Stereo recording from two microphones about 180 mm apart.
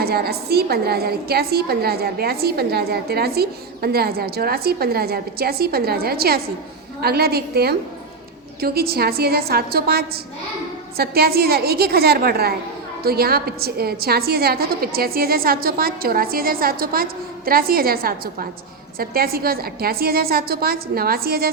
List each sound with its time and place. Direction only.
0.0 s a woman's voice: 60° right (ahead or behind)